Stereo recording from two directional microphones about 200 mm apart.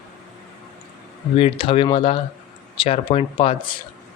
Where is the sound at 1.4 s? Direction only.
25° left (ahead or behind).